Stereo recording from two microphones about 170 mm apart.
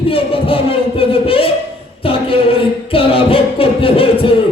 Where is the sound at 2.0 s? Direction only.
35° left (ahead or behind).